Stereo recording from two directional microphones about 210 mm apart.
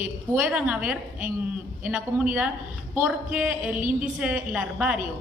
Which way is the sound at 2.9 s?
5° right (ahead or behind).